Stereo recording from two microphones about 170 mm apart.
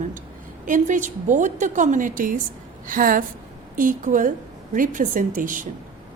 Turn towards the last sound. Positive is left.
turn(degrees=-50)  # may be behind; listen again after turning